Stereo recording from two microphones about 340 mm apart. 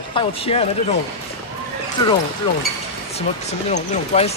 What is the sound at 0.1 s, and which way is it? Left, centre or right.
Speech, centre.